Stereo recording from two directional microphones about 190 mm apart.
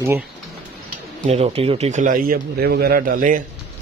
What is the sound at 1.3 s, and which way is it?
Speech, 30° right (ahead or behind).